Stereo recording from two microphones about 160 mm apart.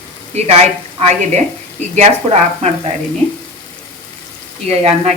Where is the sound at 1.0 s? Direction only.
45° right (ahead or behind).